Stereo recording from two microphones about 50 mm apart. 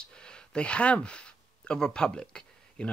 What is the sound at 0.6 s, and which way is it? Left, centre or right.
Speech, left.